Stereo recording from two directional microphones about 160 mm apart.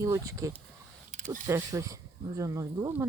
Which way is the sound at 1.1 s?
50° right (ahead or behind).